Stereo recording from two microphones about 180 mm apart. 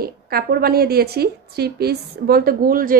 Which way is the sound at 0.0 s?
55° right (ahead or behind).